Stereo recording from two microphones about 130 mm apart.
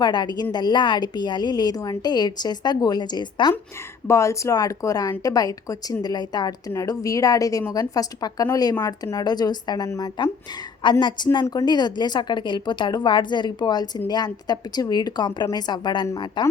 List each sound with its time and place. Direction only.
0.0 s a woman's voice: 35° left (ahead or behind)
4.0 s a woman's voice: 25° left (ahead or behind)